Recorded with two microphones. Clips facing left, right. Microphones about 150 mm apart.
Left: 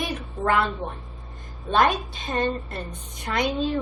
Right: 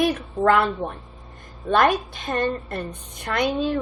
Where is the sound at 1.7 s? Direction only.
60° right (ahead or behind).